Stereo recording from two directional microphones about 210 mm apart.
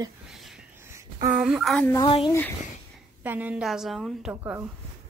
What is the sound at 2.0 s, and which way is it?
Speech, 20° left (ahead or behind).